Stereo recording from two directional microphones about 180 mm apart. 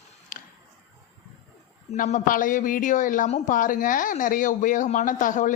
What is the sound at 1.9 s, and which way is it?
Speech, 40° left (ahead or behind).